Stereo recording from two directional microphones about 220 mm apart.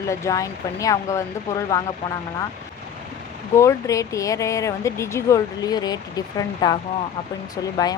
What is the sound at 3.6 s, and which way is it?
Speech, 15° left (ahead or behind).